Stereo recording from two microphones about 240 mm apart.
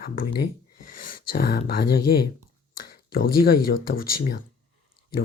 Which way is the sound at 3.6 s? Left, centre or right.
Left.